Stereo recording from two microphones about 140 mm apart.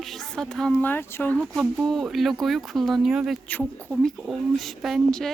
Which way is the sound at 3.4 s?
10° left (ahead or behind).